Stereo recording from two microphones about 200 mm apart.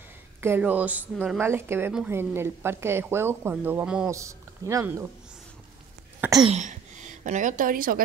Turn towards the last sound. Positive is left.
turn(degrees=-45)  # may be behind; listen again after turning